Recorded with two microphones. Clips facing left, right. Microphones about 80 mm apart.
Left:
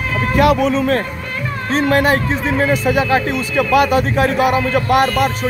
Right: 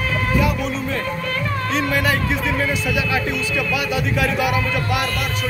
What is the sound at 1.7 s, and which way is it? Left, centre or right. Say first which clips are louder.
Speech: left 7 dB; left.